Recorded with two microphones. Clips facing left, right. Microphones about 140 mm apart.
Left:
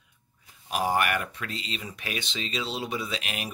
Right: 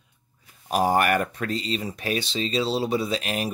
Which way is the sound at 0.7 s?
40° right (ahead or behind).